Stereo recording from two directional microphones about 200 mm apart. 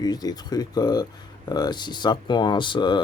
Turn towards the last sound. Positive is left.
turn(degrees=20)  # may be behind; listen again after turning